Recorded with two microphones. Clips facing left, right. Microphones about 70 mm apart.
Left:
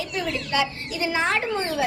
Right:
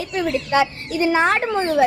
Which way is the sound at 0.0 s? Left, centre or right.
Right.